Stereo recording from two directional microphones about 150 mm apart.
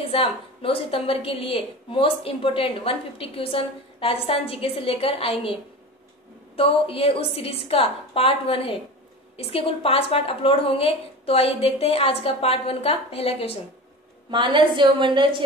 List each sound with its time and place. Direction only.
0.1 s a woman's voice: 40° left (ahead or behind)
14.3 s a woman's voice: 30° right (ahead or behind)